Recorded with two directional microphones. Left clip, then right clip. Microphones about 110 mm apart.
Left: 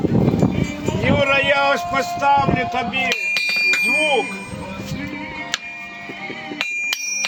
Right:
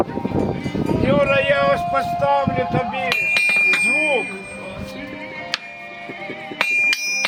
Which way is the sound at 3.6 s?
30° left (ahead or behind).